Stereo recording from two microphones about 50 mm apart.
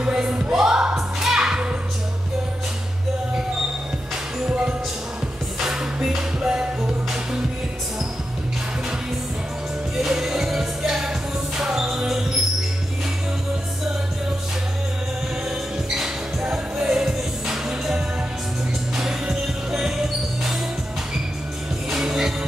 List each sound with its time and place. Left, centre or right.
0.0 s music: centre
4.4 s music: right
9.9 s music: centre
15.9 s music: centre
21.9 s music: centre